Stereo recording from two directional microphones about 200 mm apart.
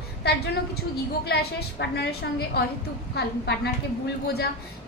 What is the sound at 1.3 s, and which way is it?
Speech, 55° left (ahead or behind).